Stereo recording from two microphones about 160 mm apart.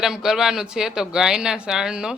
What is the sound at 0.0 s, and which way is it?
Speech, centre (ahead or behind).